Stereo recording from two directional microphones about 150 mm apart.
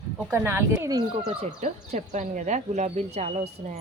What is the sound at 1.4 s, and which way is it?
Speech, 50° right (ahead or behind).